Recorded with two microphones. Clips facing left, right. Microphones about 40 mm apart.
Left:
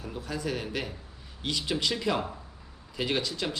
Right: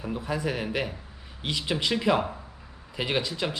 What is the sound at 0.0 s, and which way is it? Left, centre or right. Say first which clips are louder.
A man's voice: right 5 dB; right.